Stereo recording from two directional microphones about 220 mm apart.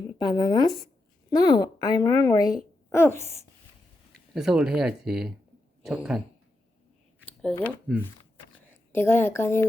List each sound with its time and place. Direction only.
0.2 s a woman's voice: 20° left (ahead or behind)
4.4 s speech: centre (ahead or behind)
7.9 s speech: 5° right (ahead or behind)
8.7 s a woman's voice: 10° left (ahead or behind)